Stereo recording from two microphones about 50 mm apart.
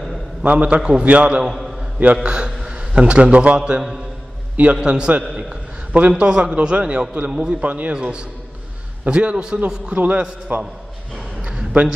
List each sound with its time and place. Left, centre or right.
0.4 s a man's voice: right
1.4 s a sound: centre
2.2 s a man's voice: centre
5.2 s a man's voice: centre
5.9 s a man's voice: right
7.6 s a man's voice: right
7.9 s a man's voice: centre
9.9 s a man's voice: right
11.4 s a sound: right